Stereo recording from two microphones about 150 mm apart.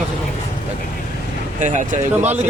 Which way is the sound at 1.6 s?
55° right (ahead or behind).